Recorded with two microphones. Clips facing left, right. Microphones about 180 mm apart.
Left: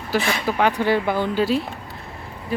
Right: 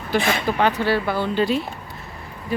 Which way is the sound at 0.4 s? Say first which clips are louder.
Even; 10° left (ahead or behind).